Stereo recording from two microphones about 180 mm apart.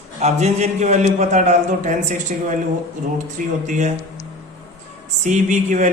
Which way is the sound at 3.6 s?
45° right (ahead or behind).